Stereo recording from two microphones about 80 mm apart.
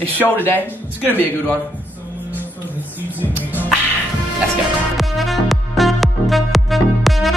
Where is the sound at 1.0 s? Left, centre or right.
Left.